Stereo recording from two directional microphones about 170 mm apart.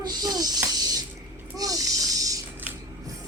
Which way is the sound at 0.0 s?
25° right (ahead or behind).